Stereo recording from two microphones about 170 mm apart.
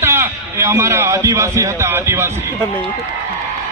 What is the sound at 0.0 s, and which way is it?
A man's voice, 15° right (ahead or behind).